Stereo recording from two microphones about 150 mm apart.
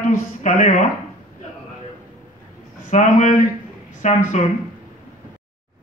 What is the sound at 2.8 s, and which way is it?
Speech, 55° left (ahead or behind).